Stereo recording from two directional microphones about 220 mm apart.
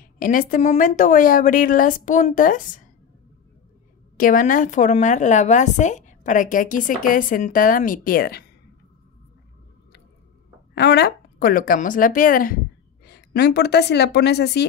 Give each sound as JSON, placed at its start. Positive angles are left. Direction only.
{"t": 0.0, "sound": "a woman's voice", "side_deg": 40}
{"t": 4.2, "sound": "a woman's voice", "side_deg": 35}
{"t": 10.7, "sound": "a woman's voice", "side_deg": 45}